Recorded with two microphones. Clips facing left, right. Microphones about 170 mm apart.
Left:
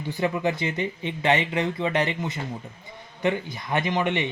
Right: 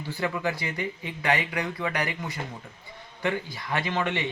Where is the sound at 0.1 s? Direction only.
20° left (ahead or behind).